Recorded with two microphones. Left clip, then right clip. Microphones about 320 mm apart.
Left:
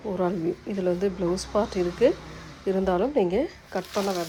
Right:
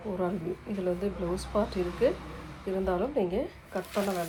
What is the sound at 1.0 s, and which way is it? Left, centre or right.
Speech, left.